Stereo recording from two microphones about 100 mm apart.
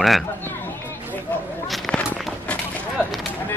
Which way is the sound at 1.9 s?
10° left (ahead or behind).